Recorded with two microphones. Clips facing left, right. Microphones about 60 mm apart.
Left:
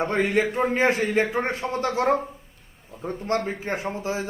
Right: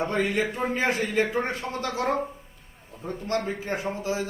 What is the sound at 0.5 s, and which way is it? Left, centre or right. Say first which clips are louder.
A man's voice: left 4 dB; left.